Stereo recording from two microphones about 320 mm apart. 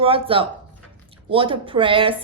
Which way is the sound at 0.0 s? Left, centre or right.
Centre.